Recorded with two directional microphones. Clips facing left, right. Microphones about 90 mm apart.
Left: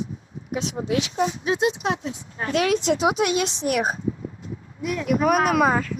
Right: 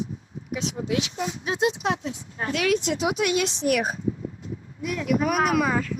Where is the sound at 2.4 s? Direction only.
40° left (ahead or behind).